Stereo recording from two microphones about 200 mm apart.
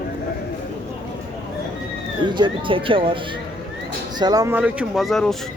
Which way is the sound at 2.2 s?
25° right (ahead or behind).